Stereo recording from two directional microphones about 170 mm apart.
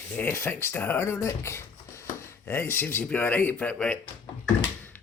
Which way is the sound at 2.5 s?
15° left (ahead or behind).